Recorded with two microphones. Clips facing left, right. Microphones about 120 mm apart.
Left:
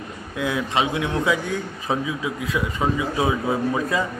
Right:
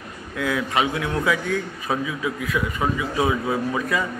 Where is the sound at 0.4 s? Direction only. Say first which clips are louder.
Even; 20° left (ahead or behind).